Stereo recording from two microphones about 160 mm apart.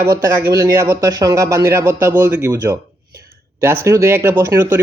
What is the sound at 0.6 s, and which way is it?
Speech, 20° right (ahead or behind).